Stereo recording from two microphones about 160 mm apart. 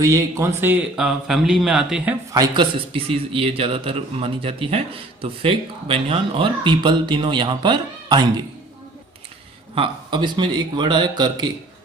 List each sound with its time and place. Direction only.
0.0 s speech: 20° right (ahead or behind); by 2.1 s 5° right (ahead or behind)
2.3 s speech: 30° right (ahead or behind)
9.7 s a man's voice: 30° right (ahead or behind)